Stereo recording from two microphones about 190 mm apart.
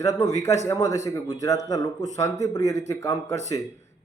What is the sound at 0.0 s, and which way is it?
A man's voice, 15° left (ahead or behind).